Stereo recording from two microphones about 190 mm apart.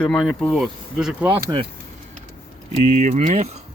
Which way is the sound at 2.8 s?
35° right (ahead or behind).